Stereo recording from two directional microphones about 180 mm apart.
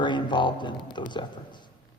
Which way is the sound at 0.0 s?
25° left (ahead or behind).